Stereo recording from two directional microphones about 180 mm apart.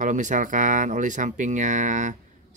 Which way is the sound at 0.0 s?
45° right (ahead or behind).